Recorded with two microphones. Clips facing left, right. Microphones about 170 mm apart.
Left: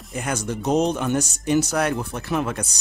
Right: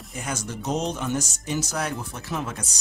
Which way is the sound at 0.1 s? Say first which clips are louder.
Left 6 dB; 60° left (ahead or behind).